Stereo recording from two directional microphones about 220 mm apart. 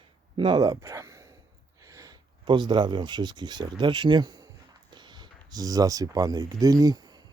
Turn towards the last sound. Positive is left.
turn(degrees=-20)  # may be behind; listen again after turning